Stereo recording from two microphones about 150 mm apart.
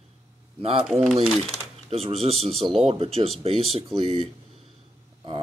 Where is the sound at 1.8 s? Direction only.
40° right (ahead or behind).